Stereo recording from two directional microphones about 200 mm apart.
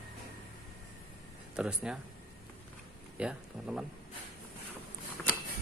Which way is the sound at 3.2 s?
5° right (ahead or behind).